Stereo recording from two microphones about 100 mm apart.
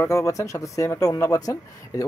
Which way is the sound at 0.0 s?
30° left (ahead or behind).